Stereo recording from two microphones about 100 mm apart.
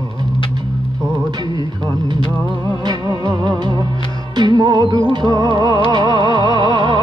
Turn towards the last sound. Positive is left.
turn(degrees=-45)  # may be behind; listen again after turning